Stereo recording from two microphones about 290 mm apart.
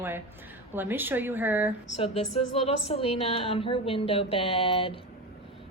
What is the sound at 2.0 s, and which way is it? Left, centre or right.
A woman's voice, left.